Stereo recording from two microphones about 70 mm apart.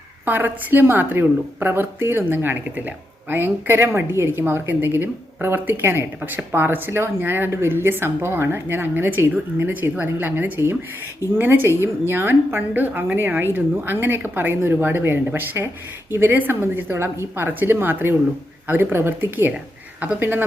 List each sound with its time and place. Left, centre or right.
0.3 s a woman's voice: right